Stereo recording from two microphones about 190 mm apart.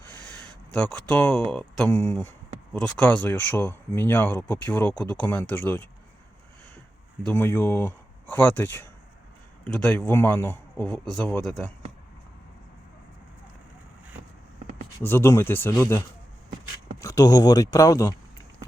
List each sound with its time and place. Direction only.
0.1 s speech: 5° left (ahead or behind)
7.3 s speech: 10° left (ahead or behind)
15.0 s speech: 10° left (ahead or behind)